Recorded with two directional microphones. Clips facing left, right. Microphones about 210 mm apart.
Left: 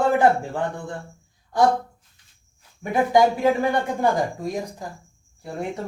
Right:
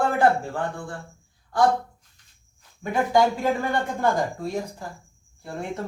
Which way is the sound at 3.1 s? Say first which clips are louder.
Left 3 dB; 15° left (ahead or behind).